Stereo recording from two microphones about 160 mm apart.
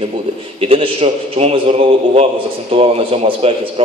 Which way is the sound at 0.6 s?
35° right (ahead or behind).